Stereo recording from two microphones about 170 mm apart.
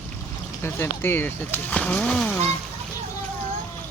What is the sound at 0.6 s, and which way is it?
Speech, 15° left (ahead or behind).